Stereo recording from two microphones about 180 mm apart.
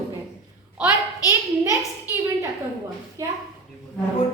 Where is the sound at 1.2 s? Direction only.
20° left (ahead or behind).